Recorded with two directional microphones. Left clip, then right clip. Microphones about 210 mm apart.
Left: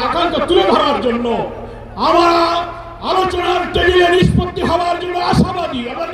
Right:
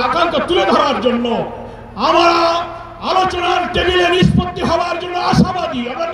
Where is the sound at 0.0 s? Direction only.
20° right (ahead or behind).